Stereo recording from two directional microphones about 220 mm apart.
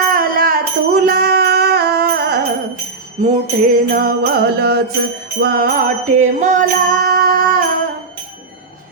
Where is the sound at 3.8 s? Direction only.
40° right (ahead or behind).